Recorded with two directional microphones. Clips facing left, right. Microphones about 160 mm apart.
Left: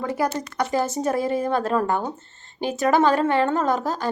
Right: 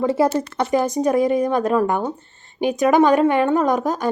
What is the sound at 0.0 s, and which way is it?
A woman's voice, 25° right (ahead or behind).